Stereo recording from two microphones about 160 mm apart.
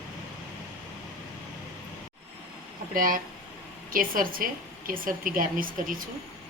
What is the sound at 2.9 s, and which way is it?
A woman's voice, 60° right (ahead or behind).